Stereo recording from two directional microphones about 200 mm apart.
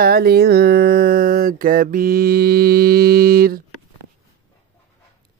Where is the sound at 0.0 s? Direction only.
50° right (ahead or behind).